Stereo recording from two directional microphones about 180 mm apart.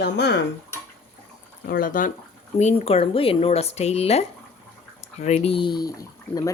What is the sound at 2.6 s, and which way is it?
Speech, 35° left (ahead or behind).